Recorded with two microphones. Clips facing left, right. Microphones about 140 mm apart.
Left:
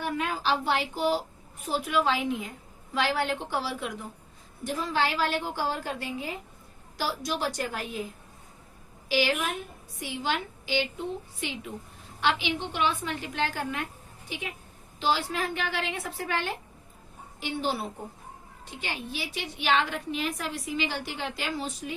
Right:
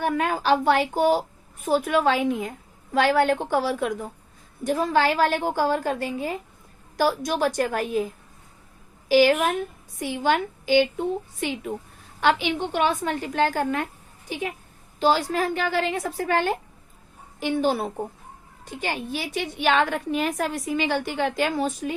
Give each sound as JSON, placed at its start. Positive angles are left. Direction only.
{"t": 0.0, "sound": "a woman's voice", "side_deg": -50}
{"t": 9.0, "sound": "a woman's voice", "side_deg": -45}